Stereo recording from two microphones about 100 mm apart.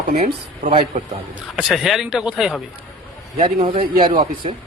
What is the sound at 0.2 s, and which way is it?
Speech, 75° right (ahead or behind).